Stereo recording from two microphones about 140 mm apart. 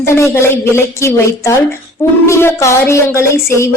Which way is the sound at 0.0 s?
20° left (ahead or behind).